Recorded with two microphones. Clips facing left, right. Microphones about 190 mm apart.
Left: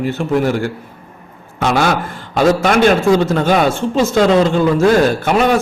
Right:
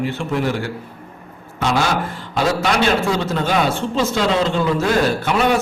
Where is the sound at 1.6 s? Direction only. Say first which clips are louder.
Left 4 dB; 55° left (ahead or behind).